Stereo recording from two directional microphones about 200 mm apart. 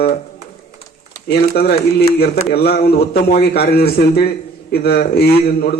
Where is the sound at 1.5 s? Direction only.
50° left (ahead or behind).